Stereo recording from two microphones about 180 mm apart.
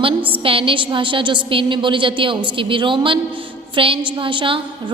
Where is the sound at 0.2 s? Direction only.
10° right (ahead or behind).